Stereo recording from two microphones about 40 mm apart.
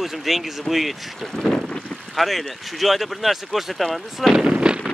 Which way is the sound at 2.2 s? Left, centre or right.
Centre.